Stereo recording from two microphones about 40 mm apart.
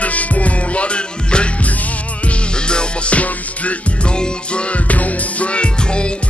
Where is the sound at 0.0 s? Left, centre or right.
Left.